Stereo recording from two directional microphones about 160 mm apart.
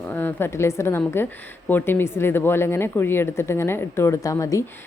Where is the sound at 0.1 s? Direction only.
15° left (ahead or behind).